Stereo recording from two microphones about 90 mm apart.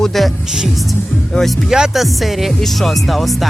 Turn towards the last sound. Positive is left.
turn(degrees=0)  # may be behind; listen again after turning